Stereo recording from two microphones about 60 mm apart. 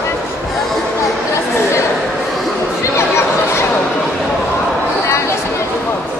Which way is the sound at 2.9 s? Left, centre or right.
Left.